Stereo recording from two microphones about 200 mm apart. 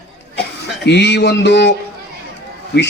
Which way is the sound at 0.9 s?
60° left (ahead or behind).